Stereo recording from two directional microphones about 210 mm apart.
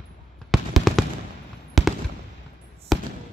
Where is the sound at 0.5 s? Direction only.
Centre (ahead or behind).